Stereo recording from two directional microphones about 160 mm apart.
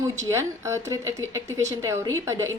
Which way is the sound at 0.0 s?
20° right (ahead or behind).